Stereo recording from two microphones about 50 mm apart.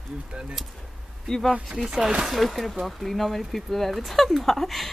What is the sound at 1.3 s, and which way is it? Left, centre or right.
Speech, centre.